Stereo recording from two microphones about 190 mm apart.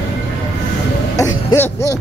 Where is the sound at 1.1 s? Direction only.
15° left (ahead or behind).